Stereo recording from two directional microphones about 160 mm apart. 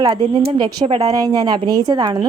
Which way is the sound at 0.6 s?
30° right (ahead or behind).